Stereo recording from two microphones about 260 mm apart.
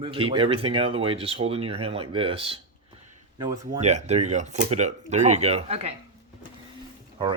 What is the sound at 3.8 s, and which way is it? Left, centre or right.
Speech, right.